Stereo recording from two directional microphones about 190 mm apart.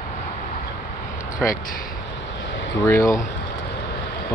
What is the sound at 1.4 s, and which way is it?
Speech, 5° left (ahead or behind).